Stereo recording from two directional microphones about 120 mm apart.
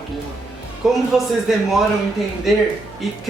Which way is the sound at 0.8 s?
5° right (ahead or behind).